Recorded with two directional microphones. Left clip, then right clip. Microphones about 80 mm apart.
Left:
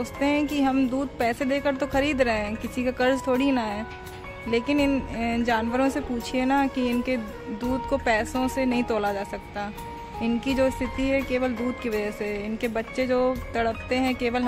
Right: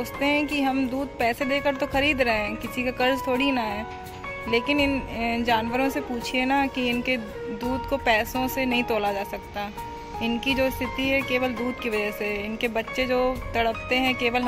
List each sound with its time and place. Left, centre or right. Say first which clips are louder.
0.0 s speech: right 1 dB; left